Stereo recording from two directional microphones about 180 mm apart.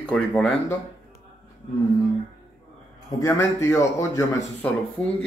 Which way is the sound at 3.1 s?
20° left (ahead or behind).